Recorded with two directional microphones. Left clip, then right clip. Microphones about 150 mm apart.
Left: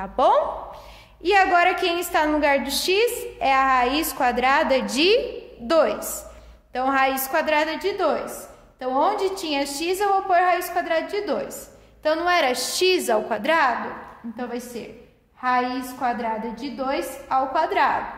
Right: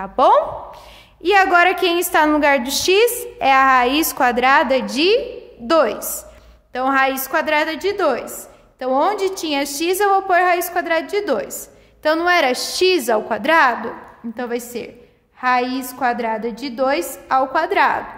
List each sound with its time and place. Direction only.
0.0 s a woman's voice: 25° right (ahead or behind); by 13.7 s 40° right (ahead or behind)
14.3 s a woman's voice: 65° right (ahead or behind); by 17.9 s 45° right (ahead or behind)